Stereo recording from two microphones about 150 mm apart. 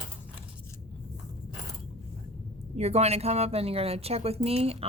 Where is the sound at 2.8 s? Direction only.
45° right (ahead or behind).